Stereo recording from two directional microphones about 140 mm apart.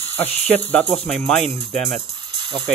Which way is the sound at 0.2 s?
10° left (ahead or behind).